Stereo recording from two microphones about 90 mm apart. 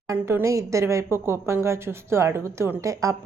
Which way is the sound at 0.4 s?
35° right (ahead or behind).